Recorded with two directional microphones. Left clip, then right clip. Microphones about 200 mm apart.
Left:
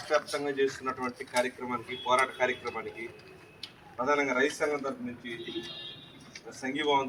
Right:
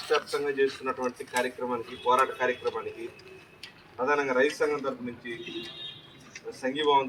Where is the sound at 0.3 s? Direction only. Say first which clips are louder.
Right 3 dB; 20° left (ahead or behind).